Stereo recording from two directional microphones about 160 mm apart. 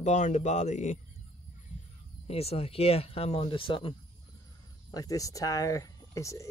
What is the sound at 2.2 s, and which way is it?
Speech, 40° left (ahead or behind).